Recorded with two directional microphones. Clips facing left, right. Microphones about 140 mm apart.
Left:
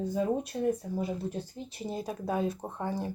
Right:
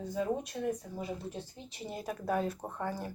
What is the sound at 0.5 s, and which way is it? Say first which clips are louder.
Speech: left 8 dB; 35° left (ahead or behind).